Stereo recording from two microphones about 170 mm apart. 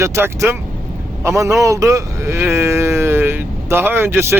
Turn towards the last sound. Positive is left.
turn(degrees=-15)  # may be behind; listen again after turning